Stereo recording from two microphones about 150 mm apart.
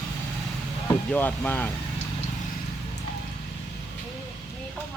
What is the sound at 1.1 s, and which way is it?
Speech, 10° left (ahead or behind).